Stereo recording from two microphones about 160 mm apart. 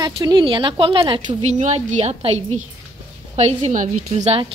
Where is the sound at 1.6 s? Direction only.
50° right (ahead or behind).